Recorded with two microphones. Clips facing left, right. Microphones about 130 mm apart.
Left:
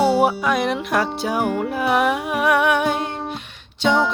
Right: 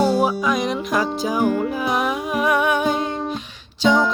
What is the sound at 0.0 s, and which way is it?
Music, 65° left (ahead or behind).